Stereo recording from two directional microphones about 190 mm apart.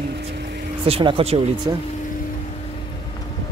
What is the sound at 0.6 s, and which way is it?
Speech, 30° right (ahead or behind).